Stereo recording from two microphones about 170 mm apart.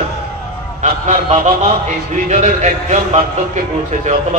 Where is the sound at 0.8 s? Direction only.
40° right (ahead or behind).